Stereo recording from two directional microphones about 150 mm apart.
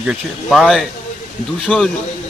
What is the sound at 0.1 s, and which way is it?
A man's voice, centre (ahead or behind).